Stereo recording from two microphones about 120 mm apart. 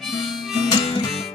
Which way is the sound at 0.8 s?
45° left (ahead or behind).